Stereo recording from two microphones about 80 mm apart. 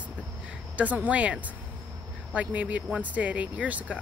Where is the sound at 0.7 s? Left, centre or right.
Centre.